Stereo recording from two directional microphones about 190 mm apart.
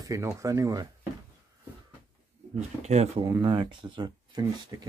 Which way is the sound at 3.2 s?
25° right (ahead or behind).